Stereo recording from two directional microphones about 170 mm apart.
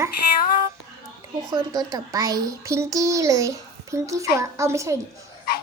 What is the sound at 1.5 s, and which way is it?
A child's voice, 20° right (ahead or behind).